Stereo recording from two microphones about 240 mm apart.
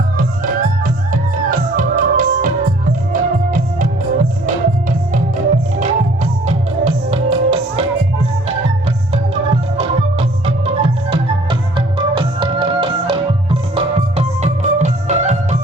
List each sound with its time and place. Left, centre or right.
0.2 s music: right
6.4 s music: right